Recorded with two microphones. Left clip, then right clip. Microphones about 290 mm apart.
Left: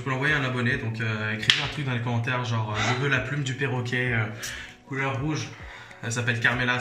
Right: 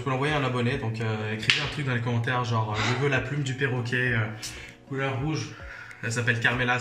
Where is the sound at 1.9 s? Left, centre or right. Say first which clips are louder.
Even; centre.